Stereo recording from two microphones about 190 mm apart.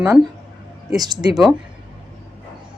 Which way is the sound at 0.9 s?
20° right (ahead or behind).